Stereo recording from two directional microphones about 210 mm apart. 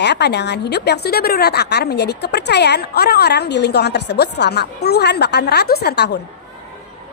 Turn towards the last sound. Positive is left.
turn(degrees=50)  # may be behind; listen again after turning